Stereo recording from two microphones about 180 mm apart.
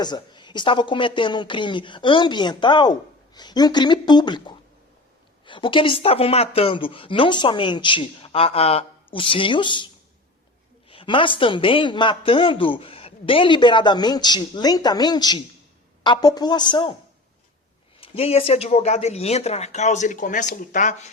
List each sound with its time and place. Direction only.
0.0 s a man's voice: 25° left (ahead or behind)
18.0 s speech: 35° left (ahead or behind)